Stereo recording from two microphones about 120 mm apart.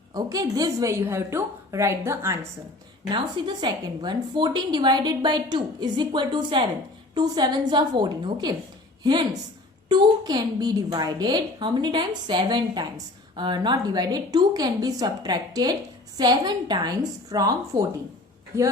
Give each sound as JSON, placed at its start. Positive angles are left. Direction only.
{"t": 0.1, "sound": "a woman's voice", "side_deg": -30}
{"t": 3.1, "sound": "a woman's voice", "side_deg": -40}